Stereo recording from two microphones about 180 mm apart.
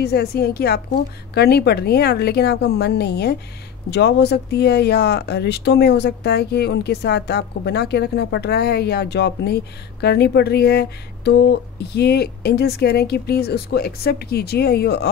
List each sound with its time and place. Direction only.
0.0 s speech: 60° left (ahead or behind)